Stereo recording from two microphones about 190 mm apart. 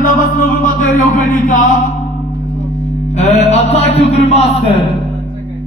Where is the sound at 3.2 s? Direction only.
35° left (ahead or behind).